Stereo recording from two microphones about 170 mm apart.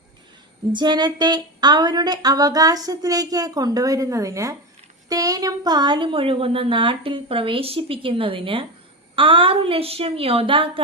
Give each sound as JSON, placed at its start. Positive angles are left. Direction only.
{"t": 0.7, "sound": "a woman's voice", "side_deg": -25}